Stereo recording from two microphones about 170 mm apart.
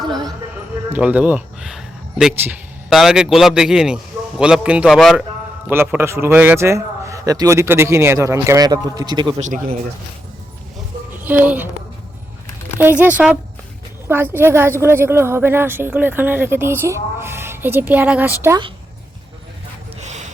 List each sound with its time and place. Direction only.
0.9 s speech: 10° right (ahead or behind)
5.6 s a woman's voice: 10° right (ahead or behind)
9.4 s speech: 50° right (ahead or behind)
11.2 s speech: 10° right (ahead or behind)
12.8 s a woman's voice: 10° right (ahead or behind)
20.0 s gasp: 45° right (ahead or behind)